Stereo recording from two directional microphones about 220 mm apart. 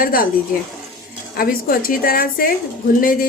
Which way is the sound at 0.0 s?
40° left (ahead or behind).